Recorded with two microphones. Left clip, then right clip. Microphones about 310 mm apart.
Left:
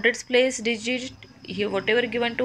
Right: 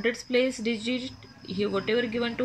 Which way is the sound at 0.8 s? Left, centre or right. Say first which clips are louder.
Left 4 dB; centre.